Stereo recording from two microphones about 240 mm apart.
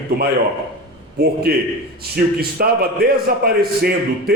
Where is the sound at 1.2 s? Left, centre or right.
Right.